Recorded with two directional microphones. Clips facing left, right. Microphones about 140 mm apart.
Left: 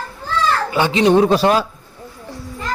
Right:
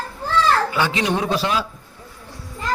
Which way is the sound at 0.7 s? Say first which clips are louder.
Left 7 dB; 25° left (ahead or behind).